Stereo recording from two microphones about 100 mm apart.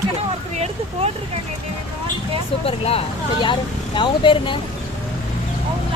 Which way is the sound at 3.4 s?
55° left (ahead or behind).